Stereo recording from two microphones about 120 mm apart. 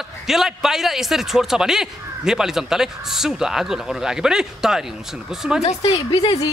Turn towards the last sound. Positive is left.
turn(degrees=55)  # may be behind; listen again after turning